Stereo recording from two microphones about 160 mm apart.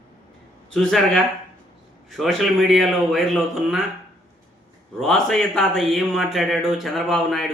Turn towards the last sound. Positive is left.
turn(degrees=0)  # may be behind; listen again after turning